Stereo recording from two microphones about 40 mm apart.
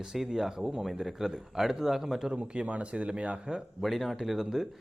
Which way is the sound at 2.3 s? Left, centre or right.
Right.